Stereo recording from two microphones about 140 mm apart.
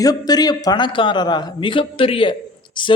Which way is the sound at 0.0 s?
25° left (ahead or behind).